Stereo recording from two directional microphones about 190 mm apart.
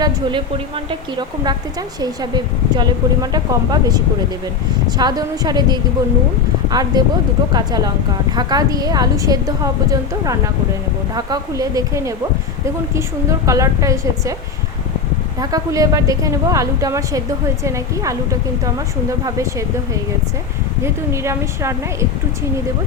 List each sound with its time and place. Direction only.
0.0 s speech: 25° right (ahead or behind)
2.0 s a woman's voice: 20° right (ahead or behind)
15.4 s a woman's voice: 20° right (ahead or behind)
19.2 s a woman's voice: 15° right (ahead or behind)
20.8 s a woman's voice: 15° right (ahead or behind)